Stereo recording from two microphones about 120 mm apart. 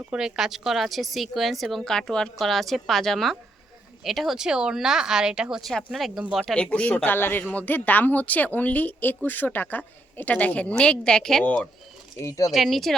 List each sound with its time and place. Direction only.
0.1 s speech: 5° right (ahead or behind)
6.6 s speech: 10° left (ahead or behind)
12.1 s speech: 30° left (ahead or behind)
12.5 s speech: centre (ahead or behind)